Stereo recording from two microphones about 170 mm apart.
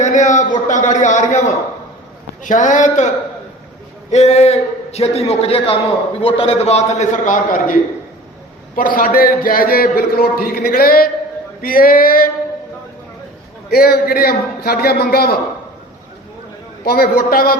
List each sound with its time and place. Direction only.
0.0 s a sound: 45° left (ahead or behind)
0.7 s a man's voice: 45° left (ahead or behind)
4.1 s a man's voice: 40° left (ahead or behind); by 12.3 s 55° left (ahead or behind)
13.7 s a man's voice: 65° left (ahead or behind)
16.8 s a man's voice: 60° left (ahead or behind)